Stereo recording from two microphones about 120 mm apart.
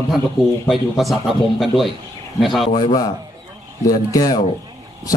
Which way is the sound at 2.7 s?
35° left (ahead or behind).